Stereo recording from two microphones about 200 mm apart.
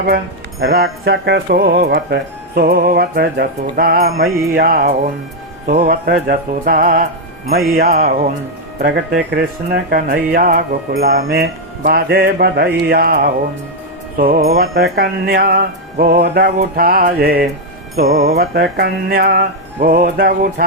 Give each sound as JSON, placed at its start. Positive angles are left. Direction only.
{"t": 0.6, "sound": "music", "side_deg": -50}
{"t": 9.3, "sound": "music", "side_deg": -55}